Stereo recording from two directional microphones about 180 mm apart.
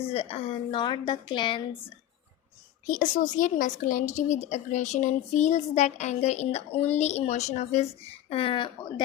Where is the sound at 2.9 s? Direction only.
45° left (ahead or behind); by 9.0 s 25° left (ahead or behind).